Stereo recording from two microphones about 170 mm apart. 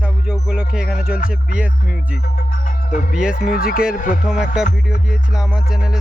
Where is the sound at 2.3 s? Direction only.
50° left (ahead or behind).